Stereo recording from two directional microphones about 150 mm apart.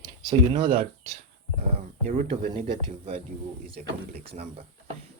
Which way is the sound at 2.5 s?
35° right (ahead or behind).